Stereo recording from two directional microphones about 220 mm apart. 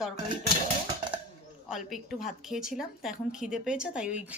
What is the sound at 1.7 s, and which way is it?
A woman's voice, centre (ahead or behind).